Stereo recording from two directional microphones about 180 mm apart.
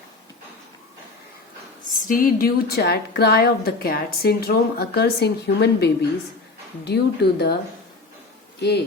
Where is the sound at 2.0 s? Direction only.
50° left (ahead or behind); by 7.5 s 65° left (ahead or behind).